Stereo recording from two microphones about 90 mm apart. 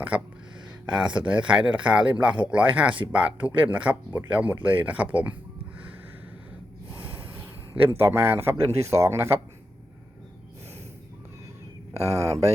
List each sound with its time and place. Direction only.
0.1 s speech: 15° right (ahead or behind)
7.8 s speech: 25° right (ahead or behind)
11.9 s speech: 35° right (ahead or behind)